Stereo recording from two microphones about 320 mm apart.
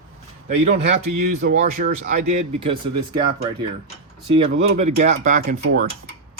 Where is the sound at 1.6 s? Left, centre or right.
Right.